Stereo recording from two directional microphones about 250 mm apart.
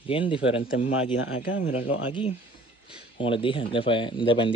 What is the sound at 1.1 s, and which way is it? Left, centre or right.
Speech, left.